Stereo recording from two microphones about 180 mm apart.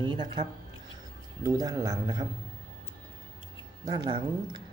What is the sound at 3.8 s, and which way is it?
Speech, 25° right (ahead or behind).